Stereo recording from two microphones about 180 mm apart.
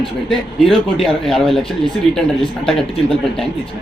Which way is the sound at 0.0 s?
Centre (ahead or behind).